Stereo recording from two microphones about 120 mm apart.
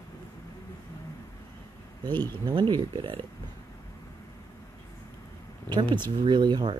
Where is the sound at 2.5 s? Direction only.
35° right (ahead or behind).